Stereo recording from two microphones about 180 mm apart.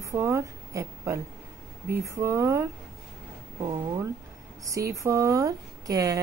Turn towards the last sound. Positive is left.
turn(degrees=-20)  # may be behind; listen again after turning